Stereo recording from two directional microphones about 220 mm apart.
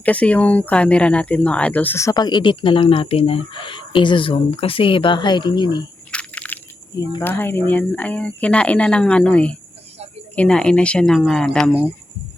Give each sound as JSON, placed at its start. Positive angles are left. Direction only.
{"t": 0.0, "sound": "speech", "side_deg": 5}
{"t": 6.1, "sound": "a sound", "side_deg": 5}
{"t": 7.1, "sound": "speech", "side_deg": 10}